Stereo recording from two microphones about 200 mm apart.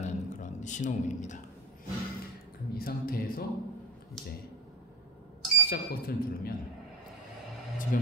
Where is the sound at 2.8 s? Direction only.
45° left (ahead or behind).